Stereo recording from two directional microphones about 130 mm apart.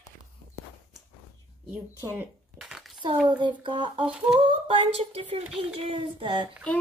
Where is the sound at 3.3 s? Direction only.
35° right (ahead or behind).